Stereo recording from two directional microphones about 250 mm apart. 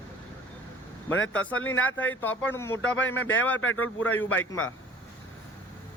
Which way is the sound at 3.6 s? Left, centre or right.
Left.